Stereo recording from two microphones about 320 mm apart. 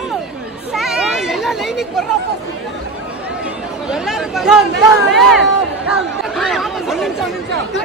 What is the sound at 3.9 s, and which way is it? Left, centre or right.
Chatter, centre.